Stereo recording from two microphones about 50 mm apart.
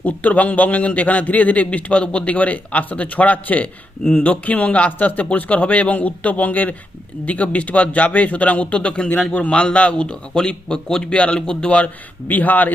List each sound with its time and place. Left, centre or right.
0.0 s a man's voice: left
12.3 s a man's voice: left